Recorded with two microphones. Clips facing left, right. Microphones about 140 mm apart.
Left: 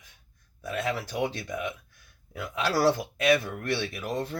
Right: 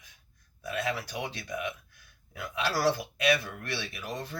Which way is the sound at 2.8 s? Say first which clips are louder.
Left 3 dB; 45° left (ahead or behind).